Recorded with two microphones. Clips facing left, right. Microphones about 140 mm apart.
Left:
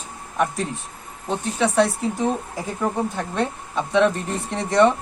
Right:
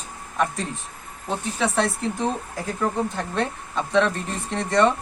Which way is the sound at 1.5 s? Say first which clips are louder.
Left 5 dB; centre (ahead or behind).